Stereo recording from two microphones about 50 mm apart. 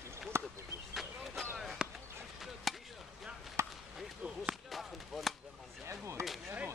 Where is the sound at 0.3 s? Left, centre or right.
Right.